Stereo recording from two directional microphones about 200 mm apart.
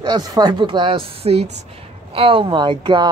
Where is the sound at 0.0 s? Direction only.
20° right (ahead or behind).